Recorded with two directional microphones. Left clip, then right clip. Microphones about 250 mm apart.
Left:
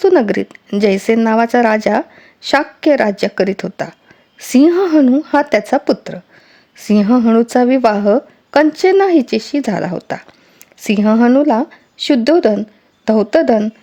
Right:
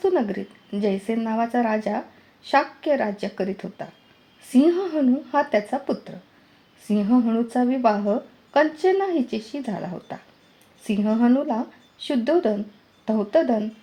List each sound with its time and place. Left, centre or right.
0.0 s a woman's voice: left